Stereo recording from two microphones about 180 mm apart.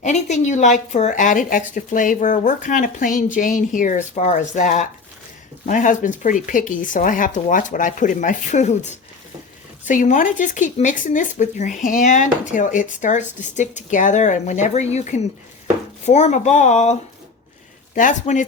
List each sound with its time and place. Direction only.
0.0 s speech: 40° left (ahead or behind)